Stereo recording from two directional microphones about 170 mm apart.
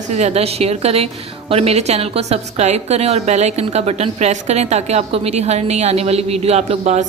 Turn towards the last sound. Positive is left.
turn(degrees=-40)  # may be behind; listen again after turning